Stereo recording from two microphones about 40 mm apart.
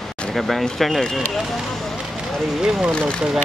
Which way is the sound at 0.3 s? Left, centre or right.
Centre.